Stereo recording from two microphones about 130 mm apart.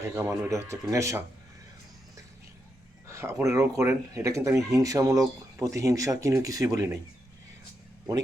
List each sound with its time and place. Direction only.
0.0 s speech: 20° right (ahead or behind)
3.1 s speech: 20° right (ahead or behind)